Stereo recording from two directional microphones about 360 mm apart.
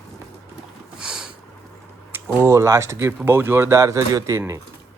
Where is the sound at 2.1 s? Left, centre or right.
Centre.